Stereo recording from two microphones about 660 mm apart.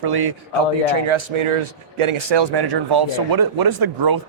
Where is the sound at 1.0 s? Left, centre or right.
Right.